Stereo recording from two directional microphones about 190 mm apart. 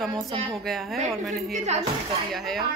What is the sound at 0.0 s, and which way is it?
Speech, centre (ahead or behind).